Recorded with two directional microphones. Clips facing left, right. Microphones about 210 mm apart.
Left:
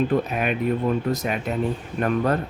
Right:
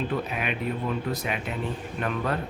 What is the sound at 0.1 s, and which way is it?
Speech, 45° left (ahead or behind).